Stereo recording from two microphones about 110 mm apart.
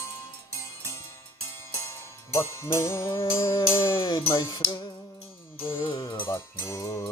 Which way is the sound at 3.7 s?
20° left (ahead or behind).